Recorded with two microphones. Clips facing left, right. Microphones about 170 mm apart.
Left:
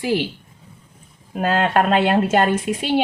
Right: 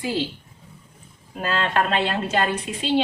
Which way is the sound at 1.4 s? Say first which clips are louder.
Left 5 dB; 50° left (ahead or behind).